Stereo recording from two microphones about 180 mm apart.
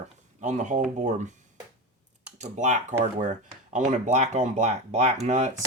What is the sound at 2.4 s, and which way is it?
Speech, 45° right (ahead or behind).